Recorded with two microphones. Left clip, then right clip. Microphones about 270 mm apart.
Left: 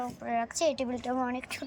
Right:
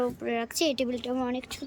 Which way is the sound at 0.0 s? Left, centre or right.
Centre.